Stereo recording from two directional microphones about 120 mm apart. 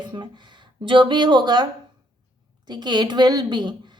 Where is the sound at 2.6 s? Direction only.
35° right (ahead or behind).